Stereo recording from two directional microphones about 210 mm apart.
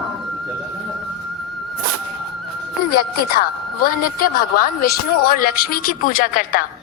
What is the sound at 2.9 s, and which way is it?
Speech, 45° left (ahead or behind).